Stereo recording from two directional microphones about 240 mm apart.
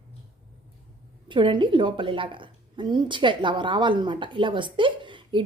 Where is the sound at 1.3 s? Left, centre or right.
Centre.